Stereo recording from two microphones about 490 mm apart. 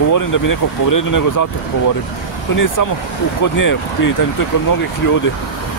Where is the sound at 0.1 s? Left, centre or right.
Left.